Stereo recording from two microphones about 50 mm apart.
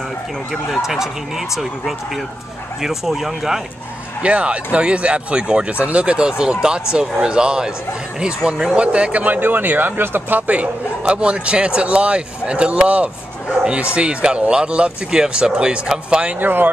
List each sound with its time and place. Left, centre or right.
0.5 s speech: centre
4.2 s speech: right
16.3 s speech: right